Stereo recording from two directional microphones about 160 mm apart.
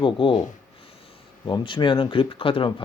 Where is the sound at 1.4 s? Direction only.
30° left (ahead or behind).